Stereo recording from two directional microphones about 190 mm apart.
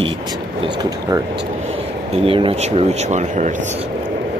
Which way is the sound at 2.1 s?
30° right (ahead or behind).